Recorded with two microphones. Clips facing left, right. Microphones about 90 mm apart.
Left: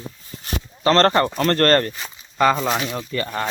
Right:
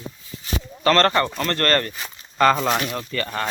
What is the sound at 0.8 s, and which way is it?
Speech, 30° left (ahead or behind).